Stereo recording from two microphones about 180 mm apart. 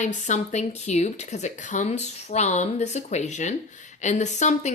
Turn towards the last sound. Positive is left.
turn(degrees=40)  # may be behind; listen again after turning